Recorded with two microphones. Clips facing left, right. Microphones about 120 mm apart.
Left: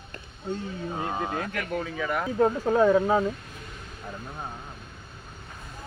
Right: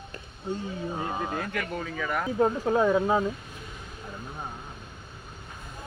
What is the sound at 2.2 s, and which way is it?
Speech, 10° right (ahead or behind).